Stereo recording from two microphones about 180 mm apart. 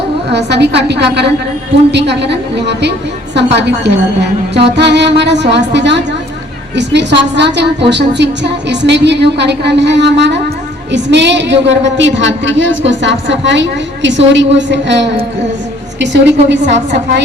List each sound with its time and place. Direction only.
0.3 s a woman's voice: 70° right (ahead or behind)